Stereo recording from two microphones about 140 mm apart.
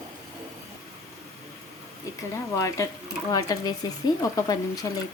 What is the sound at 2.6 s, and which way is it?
A woman's voice, 20° left (ahead or behind).